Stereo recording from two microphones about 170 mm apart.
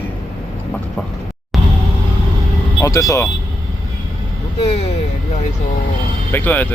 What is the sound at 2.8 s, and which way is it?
Speech, 20° left (ahead or behind).